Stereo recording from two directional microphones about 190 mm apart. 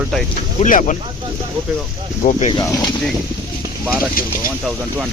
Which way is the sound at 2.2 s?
45° left (ahead or behind).